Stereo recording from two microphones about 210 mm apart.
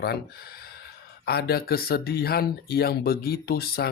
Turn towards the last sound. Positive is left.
turn(degrees=50)  # may be behind; listen again after turning